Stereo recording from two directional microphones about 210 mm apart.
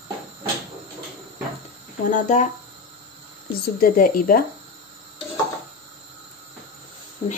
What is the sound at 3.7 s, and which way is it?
Speech, 40° left (ahead or behind).